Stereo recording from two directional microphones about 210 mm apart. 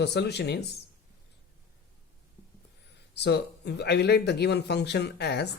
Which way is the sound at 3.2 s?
55° left (ahead or behind).